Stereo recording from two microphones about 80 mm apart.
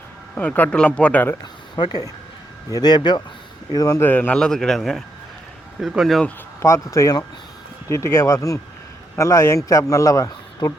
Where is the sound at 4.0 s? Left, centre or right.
Left.